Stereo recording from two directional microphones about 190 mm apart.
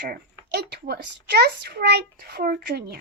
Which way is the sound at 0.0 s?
60° right (ahead or behind).